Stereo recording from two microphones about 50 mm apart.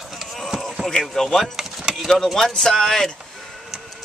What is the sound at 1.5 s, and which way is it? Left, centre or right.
Vehicle, centre.